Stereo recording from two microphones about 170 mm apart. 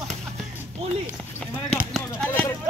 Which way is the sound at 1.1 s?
Centre (ahead or behind).